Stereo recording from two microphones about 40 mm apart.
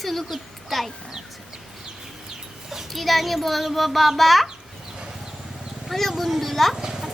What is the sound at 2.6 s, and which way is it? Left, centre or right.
Speech, centre.